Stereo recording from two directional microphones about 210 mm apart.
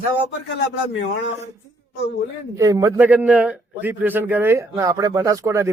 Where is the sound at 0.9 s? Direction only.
60° left (ahead or behind).